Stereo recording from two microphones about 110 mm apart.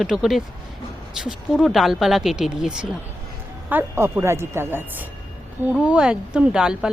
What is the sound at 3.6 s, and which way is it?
A woman's voice, 20° right (ahead or behind).